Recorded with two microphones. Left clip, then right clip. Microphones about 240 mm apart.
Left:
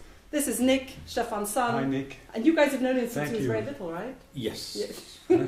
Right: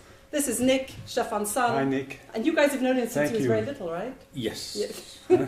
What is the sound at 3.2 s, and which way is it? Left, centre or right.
Speech, right.